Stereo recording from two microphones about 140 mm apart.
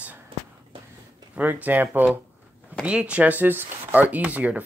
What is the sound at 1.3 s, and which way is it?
Speech, 10° right (ahead or behind).